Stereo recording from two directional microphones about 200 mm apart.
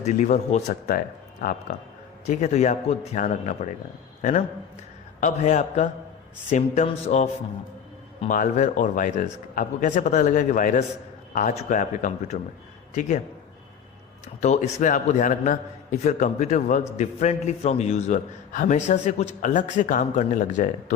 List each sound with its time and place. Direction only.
0.0 s a man's voice: 35° left (ahead or behind)
2.2 s a man's voice: 35° left (ahead or behind)
8.3 s a man's voice: 40° left (ahead or behind)
14.4 s a man's voice: 35° left (ahead or behind)